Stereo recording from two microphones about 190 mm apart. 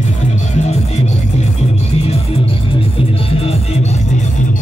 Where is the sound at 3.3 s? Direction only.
30° left (ahead or behind).